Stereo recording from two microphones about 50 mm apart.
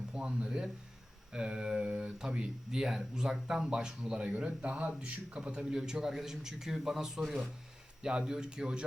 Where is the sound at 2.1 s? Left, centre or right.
Centre.